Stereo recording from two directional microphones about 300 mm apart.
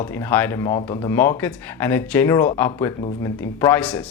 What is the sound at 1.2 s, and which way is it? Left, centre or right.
Speech, centre.